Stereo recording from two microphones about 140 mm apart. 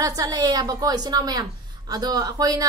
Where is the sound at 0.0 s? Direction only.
25° right (ahead or behind).